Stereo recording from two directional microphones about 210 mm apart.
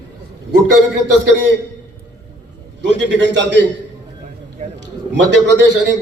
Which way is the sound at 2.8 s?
55° right (ahead or behind).